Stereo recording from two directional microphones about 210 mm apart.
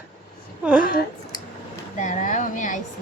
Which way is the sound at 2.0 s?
35° left (ahead or behind).